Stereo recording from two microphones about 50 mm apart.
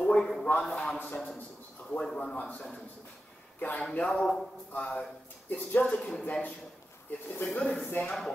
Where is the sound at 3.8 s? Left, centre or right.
Centre.